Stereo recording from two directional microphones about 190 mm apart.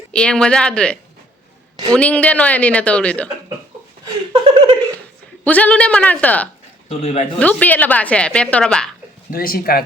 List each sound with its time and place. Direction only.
0.1 s a woman's voice: 5° left (ahead or behind)
4.0 s a sound: 25° right (ahead or behind)
5.5 s a woman's voice: 10° left (ahead or behind)
6.8 s speech: 35° left (ahead or behind)
7.3 s a woman's voice: 10° left (ahead or behind)
9.3 s speech: 50° left (ahead or behind)